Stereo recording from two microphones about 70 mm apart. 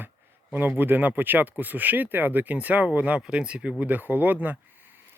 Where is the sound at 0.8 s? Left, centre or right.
Right.